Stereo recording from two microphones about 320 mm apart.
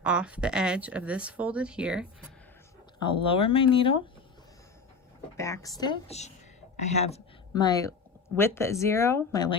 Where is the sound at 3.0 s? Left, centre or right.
Centre.